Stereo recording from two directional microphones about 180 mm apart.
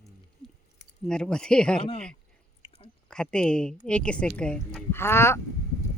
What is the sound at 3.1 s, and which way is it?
A woman's voice, 5° left (ahead or behind).